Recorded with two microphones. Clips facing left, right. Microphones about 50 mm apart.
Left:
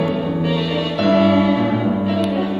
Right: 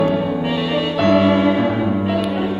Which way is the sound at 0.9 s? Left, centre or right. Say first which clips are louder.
Even; centre.